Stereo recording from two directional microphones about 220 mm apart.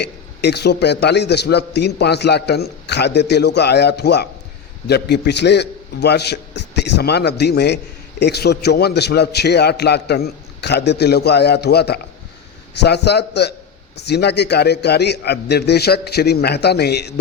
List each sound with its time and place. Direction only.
0.0 s a man's voice: 50° left (ahead or behind)